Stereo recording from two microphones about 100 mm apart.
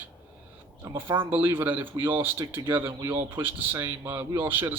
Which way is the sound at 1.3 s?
20° right (ahead or behind).